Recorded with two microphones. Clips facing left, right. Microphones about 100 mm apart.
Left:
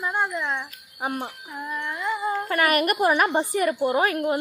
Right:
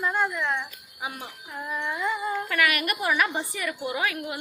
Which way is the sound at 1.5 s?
Centre (ahead or behind).